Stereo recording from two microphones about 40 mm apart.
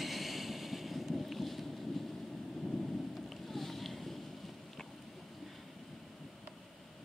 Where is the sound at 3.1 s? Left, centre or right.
Centre.